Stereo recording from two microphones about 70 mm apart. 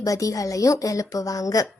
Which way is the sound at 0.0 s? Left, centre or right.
Left.